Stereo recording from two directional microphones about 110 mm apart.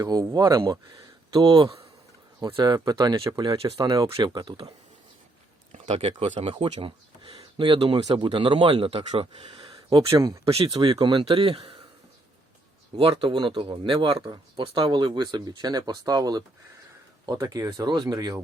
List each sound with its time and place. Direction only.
0.0 s speech: 35° right (ahead or behind)
2.4 s speech: 45° right (ahead or behind)
5.7 s speech: 70° right (ahead or behind)
9.6 s a sound: 40° right (ahead or behind)
10.1 s speech: 35° right (ahead or behind)
10.4 s speech: 60° right (ahead or behind)
11.0 s speech: 50° right (ahead or behind)
13.0 s speech: 55° right (ahead or behind); by 18.3 s 35° right (ahead or behind)